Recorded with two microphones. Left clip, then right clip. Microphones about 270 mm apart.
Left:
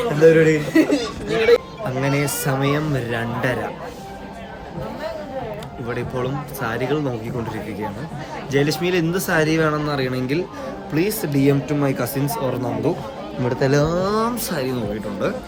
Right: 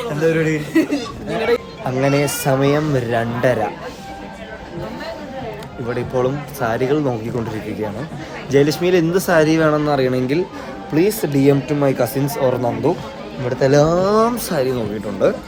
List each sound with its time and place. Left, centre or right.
0.3 s speech: right
0.7 s speech: centre
2.0 s speech: centre
5.9 s speech: centre
8.5 s speech: centre
13.8 s speech: centre